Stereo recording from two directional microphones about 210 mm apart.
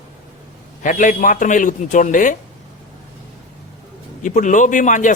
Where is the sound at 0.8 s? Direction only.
40° left (ahead or behind).